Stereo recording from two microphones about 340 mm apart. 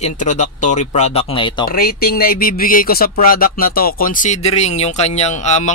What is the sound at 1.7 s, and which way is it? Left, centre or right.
Speech, left.